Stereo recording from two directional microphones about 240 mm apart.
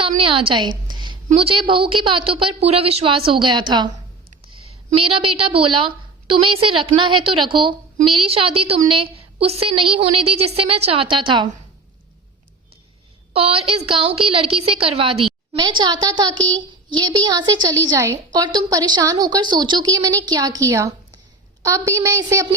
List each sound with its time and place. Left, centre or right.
0.2 s a woman's voice: right
0.9 s a sound: centre
1.3 s a woman's voice: right
4.5 s a sound: right
4.9 s a woman's voice: right
13.3 s a woman's voice: right